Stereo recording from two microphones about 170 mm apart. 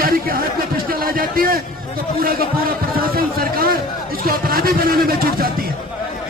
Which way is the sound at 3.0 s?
60° right (ahead or behind).